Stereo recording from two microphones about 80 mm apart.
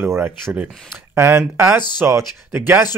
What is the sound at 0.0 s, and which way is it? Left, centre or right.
Speech, right.